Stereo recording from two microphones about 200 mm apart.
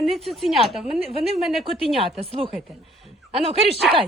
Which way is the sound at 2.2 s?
25° right (ahead or behind).